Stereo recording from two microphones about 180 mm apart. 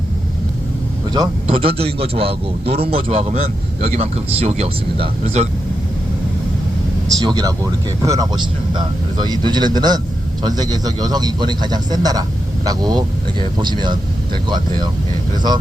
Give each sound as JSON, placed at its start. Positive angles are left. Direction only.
{"t": 1.1, "sound": "a man's voice", "side_deg": -25}
{"t": 7.1, "sound": "speech", "side_deg": -20}